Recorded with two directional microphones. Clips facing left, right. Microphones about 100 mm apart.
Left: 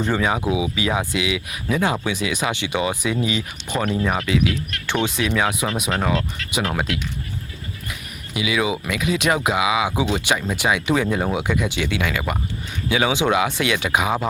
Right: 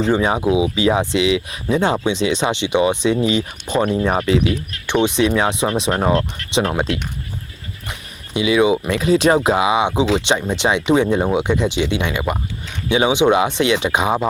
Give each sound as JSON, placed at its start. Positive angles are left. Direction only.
{"t": 0.1, "sound": "speech", "side_deg": -25}
{"t": 4.9, "sound": "speech", "side_deg": -20}
{"t": 8.3, "sound": "speech", "side_deg": -30}